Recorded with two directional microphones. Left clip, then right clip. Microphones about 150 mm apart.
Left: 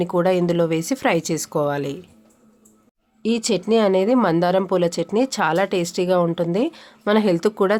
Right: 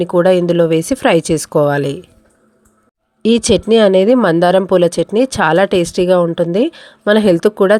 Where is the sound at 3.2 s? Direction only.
45° right (ahead or behind).